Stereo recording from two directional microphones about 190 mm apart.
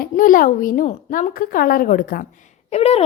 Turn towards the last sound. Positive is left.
turn(degrees=35)  # may be behind; listen again after turning